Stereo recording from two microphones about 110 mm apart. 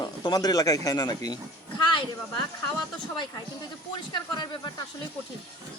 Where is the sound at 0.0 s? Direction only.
40° left (ahead or behind).